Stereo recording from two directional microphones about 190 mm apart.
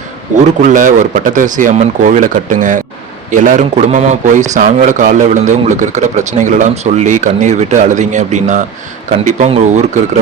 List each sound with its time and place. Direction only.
0.6 s a man's voice: 45° right (ahead or behind)